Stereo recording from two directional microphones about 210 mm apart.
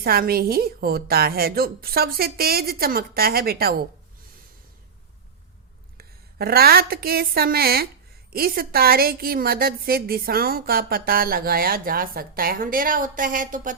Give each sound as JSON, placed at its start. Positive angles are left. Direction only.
{"t": 0.0, "sound": "a woman's voice", "side_deg": -45}
{"t": 6.0, "sound": "a woman's voice", "side_deg": -45}